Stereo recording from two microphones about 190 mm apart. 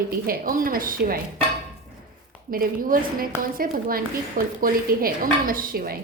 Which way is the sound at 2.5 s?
50° right (ahead or behind).